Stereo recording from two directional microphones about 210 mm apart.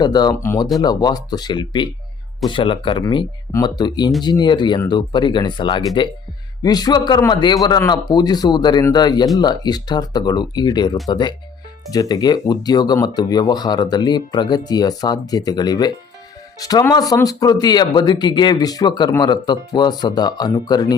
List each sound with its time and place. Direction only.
0.0 s speech: 20° left (ahead or behind)